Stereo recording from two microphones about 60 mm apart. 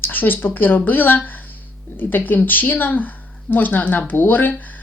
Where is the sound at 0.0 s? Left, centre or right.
Left.